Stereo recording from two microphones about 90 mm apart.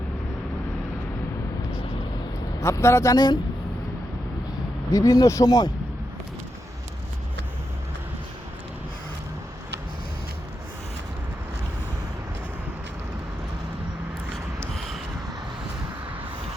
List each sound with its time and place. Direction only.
2.6 s speech: 35° left (ahead or behind)
4.9 s speech: 40° left (ahead or behind)